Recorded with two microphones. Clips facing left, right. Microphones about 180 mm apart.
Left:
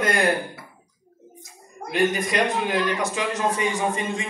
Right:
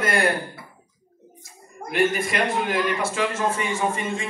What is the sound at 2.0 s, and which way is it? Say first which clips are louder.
Speech: even; 15° left (ahead or behind).